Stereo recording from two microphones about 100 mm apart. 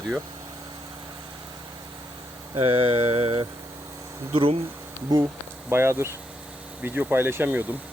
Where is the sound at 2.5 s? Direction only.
65° right (ahead or behind).